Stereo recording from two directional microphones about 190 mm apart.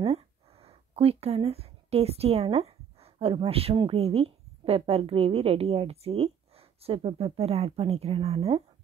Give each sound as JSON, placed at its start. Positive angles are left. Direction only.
{"t": 0.0, "sound": "speech", "side_deg": -30}